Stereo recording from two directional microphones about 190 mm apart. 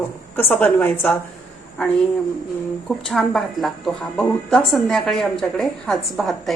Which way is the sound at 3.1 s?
Centre (ahead or behind).